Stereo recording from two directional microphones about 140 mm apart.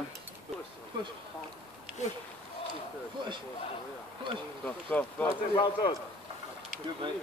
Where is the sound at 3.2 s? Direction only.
35° right (ahead or behind).